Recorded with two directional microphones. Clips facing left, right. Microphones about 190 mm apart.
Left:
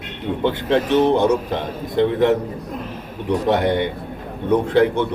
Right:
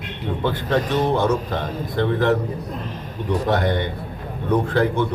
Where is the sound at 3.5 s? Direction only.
15° left (ahead or behind).